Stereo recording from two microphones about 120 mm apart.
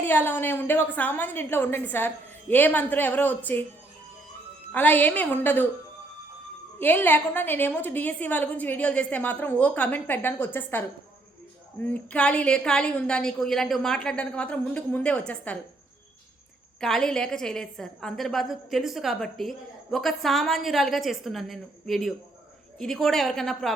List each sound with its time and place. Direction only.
0.0 s a woman's voice: 15° left (ahead or behind)
4.7 s a woman's voice: 15° left (ahead or behind)
6.7 s a woman's voice: 15° left (ahead or behind)
16.8 s a woman's voice: 5° left (ahead or behind)